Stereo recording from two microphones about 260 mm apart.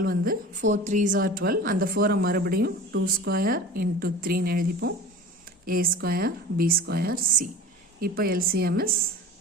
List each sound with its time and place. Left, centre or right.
0.0 s a woman's voice: right